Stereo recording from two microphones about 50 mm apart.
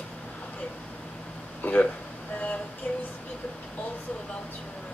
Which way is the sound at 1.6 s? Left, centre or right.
Left.